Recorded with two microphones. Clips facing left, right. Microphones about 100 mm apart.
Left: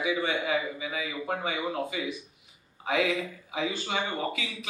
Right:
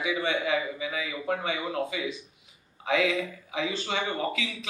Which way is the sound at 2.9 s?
30° left (ahead or behind).